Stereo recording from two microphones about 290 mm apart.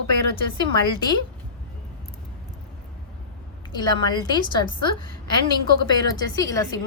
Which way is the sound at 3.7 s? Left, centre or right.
Centre.